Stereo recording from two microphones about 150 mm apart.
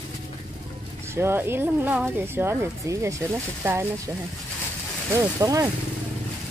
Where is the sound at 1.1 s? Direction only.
15° right (ahead or behind).